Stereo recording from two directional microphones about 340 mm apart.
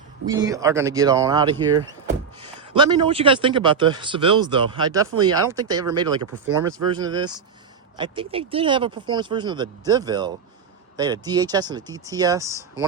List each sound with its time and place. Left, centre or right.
0.3 s a man's voice: centre